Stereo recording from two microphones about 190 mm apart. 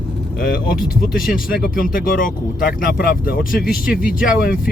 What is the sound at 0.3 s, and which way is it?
Speech, 45° left (ahead or behind).